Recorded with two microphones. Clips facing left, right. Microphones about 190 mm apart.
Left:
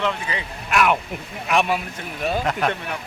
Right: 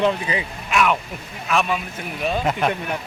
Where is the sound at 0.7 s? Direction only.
5° left (ahead or behind).